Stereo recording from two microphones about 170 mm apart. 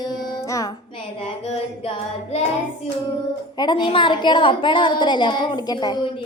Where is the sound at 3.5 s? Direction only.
25° left (ahead or behind).